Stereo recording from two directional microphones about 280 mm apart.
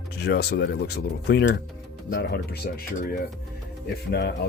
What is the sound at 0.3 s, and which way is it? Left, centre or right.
Speech, left.